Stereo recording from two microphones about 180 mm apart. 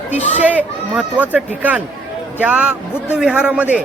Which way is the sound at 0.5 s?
10° right (ahead or behind).